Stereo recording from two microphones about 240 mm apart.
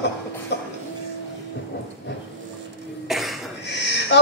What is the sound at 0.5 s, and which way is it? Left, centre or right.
Cough, left.